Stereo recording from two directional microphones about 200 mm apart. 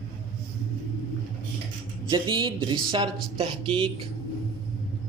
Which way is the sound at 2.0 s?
20° right (ahead or behind).